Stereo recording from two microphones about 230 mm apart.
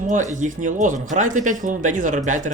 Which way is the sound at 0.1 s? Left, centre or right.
Right.